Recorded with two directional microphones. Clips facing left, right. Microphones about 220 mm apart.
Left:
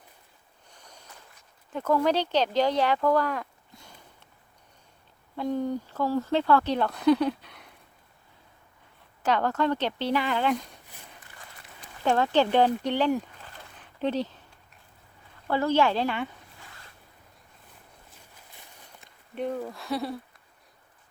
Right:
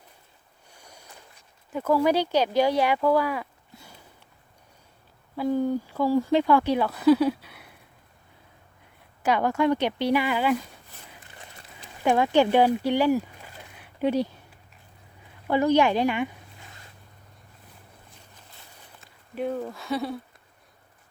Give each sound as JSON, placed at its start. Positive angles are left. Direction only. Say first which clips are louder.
{"t": 0.7, "sound": "boat", "louder": "right 2 dB", "side_deg": -10}
{"t": 1.7, "sound": "speech", "louder": "right 2 dB", "side_deg": -10}
{"t": 5.4, "sound": "speech", "louder": "right 4 dB", "side_deg": -5}
{"t": 9.2, "sound": "speech", "louder": "right 3 dB", "side_deg": -10}
{"t": 12.0, "sound": "speech", "louder": "right 3 dB", "side_deg": -15}
{"t": 15.4, "sound": "speech", "louder": "right 3 dB", "side_deg": -15}
{"t": 19.3, "sound": "speech", "louder": "right 2 dB", "side_deg": -5}